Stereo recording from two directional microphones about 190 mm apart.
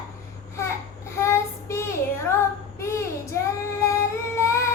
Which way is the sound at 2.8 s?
15° left (ahead or behind).